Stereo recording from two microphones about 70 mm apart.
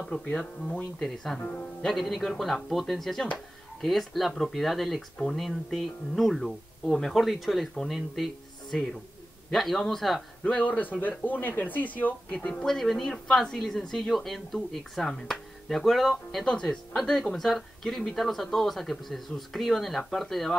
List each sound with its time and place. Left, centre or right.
0.7 s speech: centre
10.4 s speech: centre
12.6 s speech: centre